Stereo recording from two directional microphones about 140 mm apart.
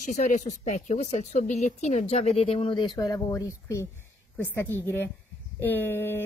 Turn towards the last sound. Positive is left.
turn(degrees=15)  # may be behind; listen again after turning